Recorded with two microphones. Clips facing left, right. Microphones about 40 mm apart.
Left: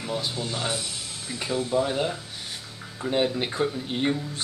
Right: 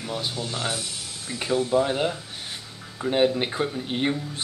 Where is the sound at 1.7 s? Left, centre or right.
Centre.